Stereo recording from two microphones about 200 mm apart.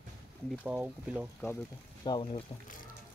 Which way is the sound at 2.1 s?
25° left (ahead or behind).